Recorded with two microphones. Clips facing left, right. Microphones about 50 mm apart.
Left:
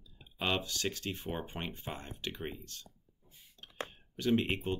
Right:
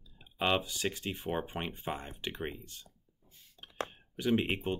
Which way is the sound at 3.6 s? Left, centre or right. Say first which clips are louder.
Right 3 dB; centre.